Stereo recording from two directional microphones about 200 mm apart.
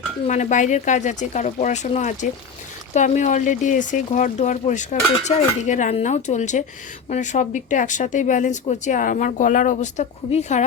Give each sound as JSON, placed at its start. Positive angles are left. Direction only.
{"t": 0.3, "sound": "speech", "side_deg": 35}